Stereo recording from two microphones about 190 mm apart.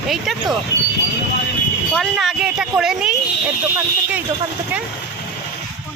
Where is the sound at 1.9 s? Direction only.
Centre (ahead or behind).